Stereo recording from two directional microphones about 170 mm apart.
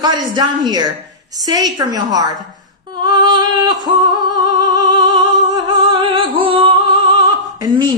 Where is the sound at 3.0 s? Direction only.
25° right (ahead or behind).